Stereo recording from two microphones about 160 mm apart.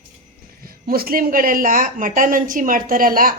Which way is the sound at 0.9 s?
70° right (ahead or behind).